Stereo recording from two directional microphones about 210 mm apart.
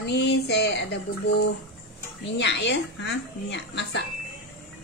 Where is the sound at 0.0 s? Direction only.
55° left (ahead or behind).